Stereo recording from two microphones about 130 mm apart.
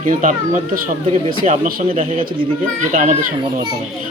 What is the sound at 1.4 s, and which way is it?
Speech, 75° right (ahead or behind).